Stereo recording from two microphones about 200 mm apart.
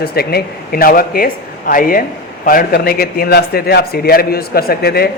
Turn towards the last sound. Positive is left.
turn(degrees=50)  # may be behind; listen again after turning